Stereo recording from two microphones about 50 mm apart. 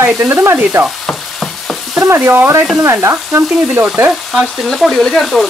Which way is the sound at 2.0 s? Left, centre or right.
Right.